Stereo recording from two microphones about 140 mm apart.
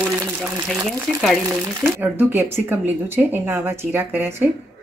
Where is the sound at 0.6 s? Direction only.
Centre (ahead or behind).